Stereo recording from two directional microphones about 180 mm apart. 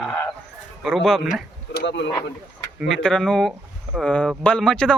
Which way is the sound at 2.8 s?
Centre (ahead or behind).